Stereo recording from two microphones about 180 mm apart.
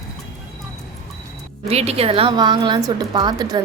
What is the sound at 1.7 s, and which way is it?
A woman's voice, 35° right (ahead or behind).